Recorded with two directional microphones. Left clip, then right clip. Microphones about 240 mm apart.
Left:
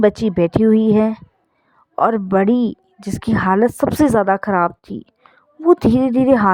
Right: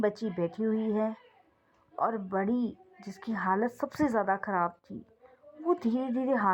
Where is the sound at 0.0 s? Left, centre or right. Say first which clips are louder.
Left 15 dB; left.